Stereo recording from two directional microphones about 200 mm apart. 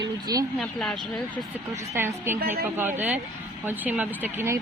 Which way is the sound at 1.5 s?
15° right (ahead or behind).